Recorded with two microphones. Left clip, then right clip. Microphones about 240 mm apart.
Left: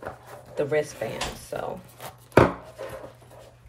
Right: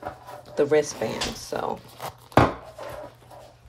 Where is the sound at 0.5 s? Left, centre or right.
Right.